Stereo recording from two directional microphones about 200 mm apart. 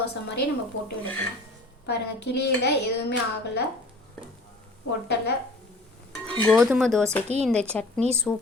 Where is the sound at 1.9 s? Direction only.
55° left (ahead or behind).